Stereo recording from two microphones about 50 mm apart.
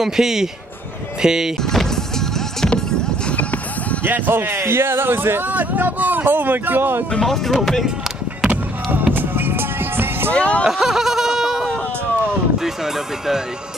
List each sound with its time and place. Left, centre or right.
0.0 s speech: centre
4.3 s speech: right
5.5 s speech: right
7.2 s speech: centre
8.5 s music: right
9.1 s music: right
10.3 s speech: left
10.6 s a sound: centre